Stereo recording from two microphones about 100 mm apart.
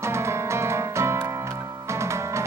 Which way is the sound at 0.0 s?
30° right (ahead or behind).